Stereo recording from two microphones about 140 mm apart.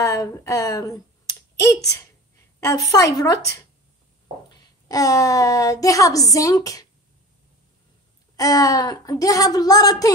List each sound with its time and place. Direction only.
0.0 s speech: 20° left (ahead or behind)
4.8 s speech: 25° left (ahead or behind)
8.4 s speech: 25° left (ahead or behind)